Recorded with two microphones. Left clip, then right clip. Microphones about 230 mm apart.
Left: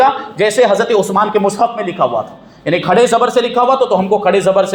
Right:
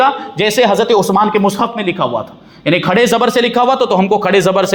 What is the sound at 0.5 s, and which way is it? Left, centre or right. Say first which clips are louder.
A man's voice: right 1 dB; right.